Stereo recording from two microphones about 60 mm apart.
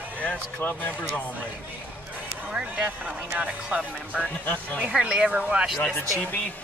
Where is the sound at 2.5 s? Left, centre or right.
Right.